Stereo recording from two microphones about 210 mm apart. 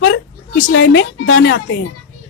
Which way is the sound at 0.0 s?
60° left (ahead or behind).